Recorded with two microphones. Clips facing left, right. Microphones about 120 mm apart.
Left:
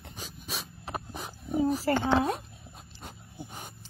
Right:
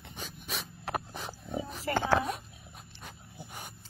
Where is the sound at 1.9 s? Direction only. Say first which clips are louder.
Even; 40° left (ahead or behind).